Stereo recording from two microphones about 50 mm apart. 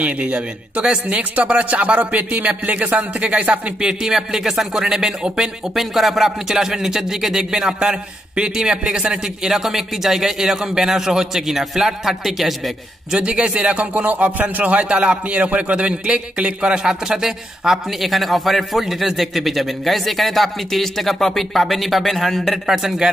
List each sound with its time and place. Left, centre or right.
0.0 s speech: right
5.8 s a man's voice: centre
9.4 s a man's voice: centre
13.1 s a man's voice: right; by 22.6 s centre
22.7 s a man's voice: centre